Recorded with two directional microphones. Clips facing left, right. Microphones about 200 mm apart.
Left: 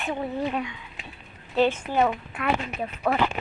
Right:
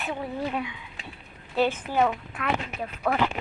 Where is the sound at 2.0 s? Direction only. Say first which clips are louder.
Even; 5° left (ahead or behind).